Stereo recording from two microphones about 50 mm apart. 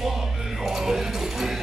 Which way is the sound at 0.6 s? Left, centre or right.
Centre.